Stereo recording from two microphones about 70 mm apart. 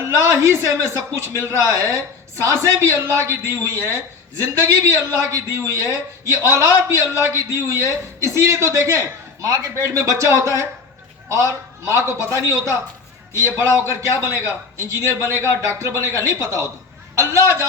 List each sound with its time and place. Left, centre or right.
0.2 s a man's voice: right